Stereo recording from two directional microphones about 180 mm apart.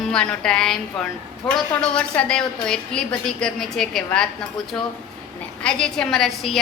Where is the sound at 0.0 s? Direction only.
5° left (ahead or behind).